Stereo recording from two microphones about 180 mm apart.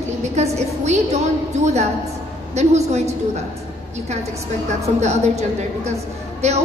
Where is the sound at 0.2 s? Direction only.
40° right (ahead or behind).